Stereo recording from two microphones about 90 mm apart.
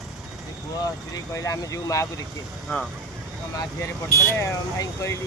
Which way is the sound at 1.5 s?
35° left (ahead or behind).